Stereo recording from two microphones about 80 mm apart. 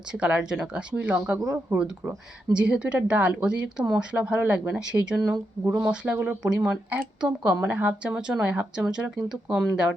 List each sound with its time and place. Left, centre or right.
0.1 s a woman's voice: centre